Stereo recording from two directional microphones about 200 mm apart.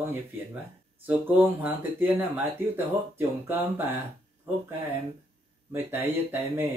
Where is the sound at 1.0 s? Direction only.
10° right (ahead or behind).